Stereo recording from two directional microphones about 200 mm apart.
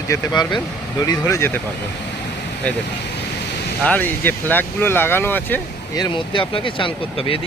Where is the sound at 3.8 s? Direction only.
10° left (ahead or behind).